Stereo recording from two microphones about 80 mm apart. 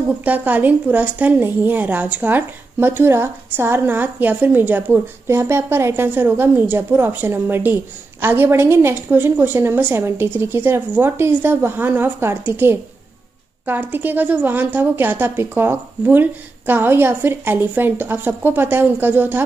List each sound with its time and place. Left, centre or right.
0.2 s a woman's voice: right